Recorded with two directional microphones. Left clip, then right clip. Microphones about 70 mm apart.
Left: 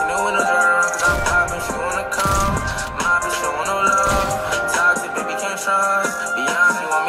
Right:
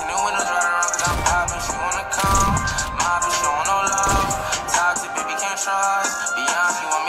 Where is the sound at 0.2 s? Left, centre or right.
Right.